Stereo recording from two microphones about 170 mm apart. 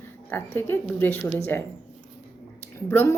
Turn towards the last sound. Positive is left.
turn(degrees=15)  # may be behind; listen again after turning